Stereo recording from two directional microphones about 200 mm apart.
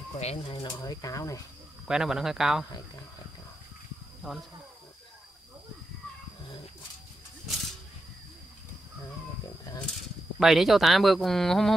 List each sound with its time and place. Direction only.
0.2 s speech: 30° left (ahead or behind)
0.6 s speech: 15° left (ahead or behind)
1.9 s speech: 5° right (ahead or behind)
10.4 s speech: centre (ahead or behind)